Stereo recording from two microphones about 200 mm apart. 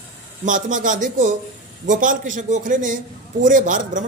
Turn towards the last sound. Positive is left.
turn(degrees=-40)  # may be behind; listen again after turning